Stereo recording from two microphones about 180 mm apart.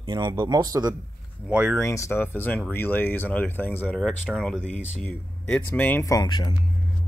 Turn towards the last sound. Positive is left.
turn(degrees=25)  # may be behind; listen again after turning